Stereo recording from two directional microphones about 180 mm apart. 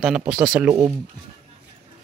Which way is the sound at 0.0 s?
5° right (ahead or behind).